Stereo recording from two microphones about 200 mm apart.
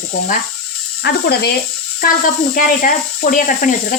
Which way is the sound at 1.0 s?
55° left (ahead or behind).